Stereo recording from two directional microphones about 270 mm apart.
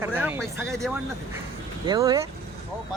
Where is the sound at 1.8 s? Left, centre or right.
Centre.